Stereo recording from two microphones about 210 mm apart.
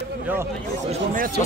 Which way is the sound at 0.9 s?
40° right (ahead or behind).